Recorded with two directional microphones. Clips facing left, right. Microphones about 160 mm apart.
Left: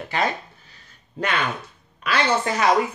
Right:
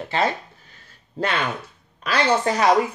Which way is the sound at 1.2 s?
30° right (ahead or behind).